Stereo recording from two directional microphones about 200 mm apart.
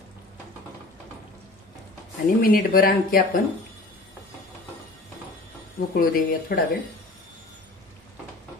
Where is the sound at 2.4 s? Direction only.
45° left (ahead or behind).